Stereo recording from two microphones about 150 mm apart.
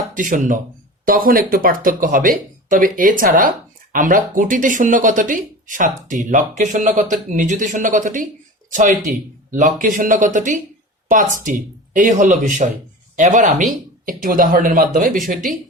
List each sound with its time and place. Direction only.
0.2 s speech: 60° right (ahead or behind)
14.0 s speech: 65° right (ahead or behind)